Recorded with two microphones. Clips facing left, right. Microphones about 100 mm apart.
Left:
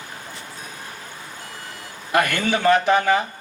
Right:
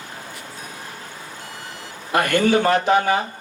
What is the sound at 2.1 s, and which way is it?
A man's voice, 30° right (ahead or behind).